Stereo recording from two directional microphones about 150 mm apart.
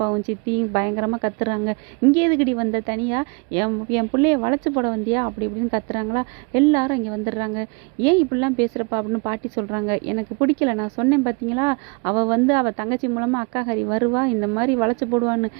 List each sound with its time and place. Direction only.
0.0 s a woman's voice: 20° right (ahead or behind)